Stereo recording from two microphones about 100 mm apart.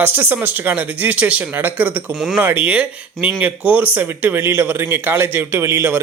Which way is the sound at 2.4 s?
20° right (ahead or behind).